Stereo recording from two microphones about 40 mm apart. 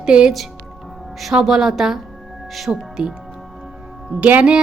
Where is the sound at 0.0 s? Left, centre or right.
Right.